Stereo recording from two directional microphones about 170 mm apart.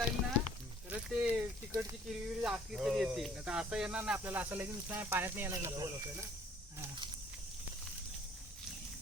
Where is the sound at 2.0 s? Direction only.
5° right (ahead or behind).